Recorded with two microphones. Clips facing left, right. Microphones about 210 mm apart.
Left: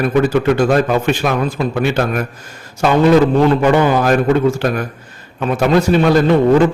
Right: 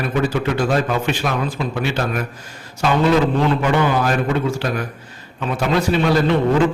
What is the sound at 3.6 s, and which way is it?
Speech, 45° left (ahead or behind).